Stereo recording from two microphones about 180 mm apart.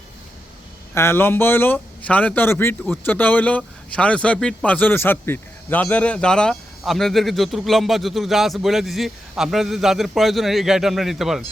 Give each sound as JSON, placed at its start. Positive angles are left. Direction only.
{"t": 0.9, "sound": "speech", "side_deg": 15}